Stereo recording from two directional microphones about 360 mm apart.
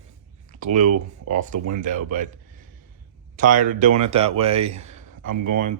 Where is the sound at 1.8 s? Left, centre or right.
Right.